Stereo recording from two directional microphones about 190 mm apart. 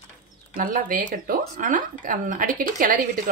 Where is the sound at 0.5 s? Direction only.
50° right (ahead or behind).